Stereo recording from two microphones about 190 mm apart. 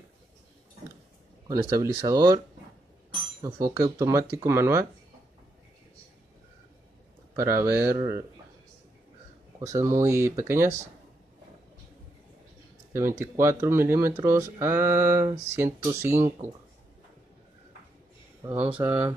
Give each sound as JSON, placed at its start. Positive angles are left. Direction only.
{"t": 1.5, "sound": "speech", "side_deg": -15}
{"t": 3.4, "sound": "speech", "side_deg": -15}
{"t": 7.3, "sound": "speech", "side_deg": -15}
{"t": 9.6, "sound": "speech", "side_deg": -15}
{"t": 12.9, "sound": "speech", "side_deg": -15}
{"t": 18.9, "sound": "speech", "side_deg": -20}